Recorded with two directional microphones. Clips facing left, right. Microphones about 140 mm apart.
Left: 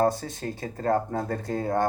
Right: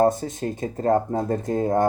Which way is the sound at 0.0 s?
25° right (ahead or behind).